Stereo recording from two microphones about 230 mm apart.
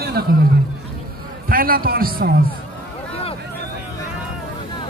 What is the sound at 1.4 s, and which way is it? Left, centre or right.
Speech, right.